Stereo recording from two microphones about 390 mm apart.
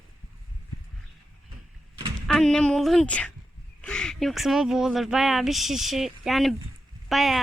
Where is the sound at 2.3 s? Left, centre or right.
Centre.